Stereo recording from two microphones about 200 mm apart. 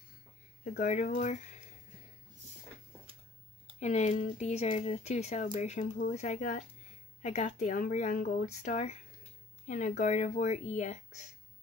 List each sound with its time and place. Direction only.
0.7 s speech: 40° left (ahead or behind)
3.8 s speech: 35° left (ahead or behind)